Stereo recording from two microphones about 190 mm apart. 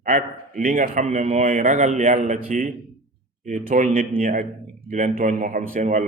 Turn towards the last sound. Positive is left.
turn(degrees=-40)  # may be behind; listen again after turning